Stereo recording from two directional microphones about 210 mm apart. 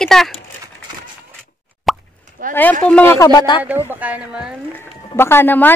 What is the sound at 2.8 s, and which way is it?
Speech, 10° left (ahead or behind).